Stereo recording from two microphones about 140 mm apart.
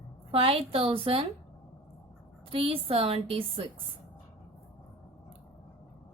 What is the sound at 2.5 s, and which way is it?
A woman's voice, 45° right (ahead or behind).